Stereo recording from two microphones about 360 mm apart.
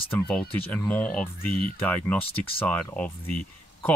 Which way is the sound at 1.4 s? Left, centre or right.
Left.